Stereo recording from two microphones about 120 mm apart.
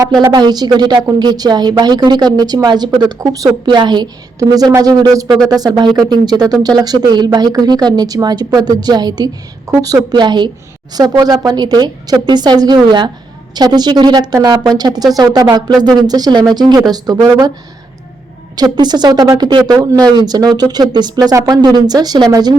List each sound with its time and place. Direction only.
0.0 s a woman's voice: 35° right (ahead or behind)
18.5 s a woman's voice: 35° right (ahead or behind)